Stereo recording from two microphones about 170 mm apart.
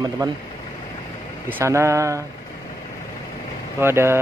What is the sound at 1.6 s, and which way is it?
Speech, 15° right (ahead or behind).